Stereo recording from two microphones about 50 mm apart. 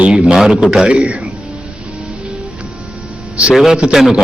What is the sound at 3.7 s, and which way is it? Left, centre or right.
Speech, centre.